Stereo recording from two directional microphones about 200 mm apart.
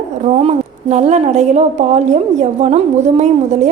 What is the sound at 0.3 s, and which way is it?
A woman's voice, 35° right (ahead or behind).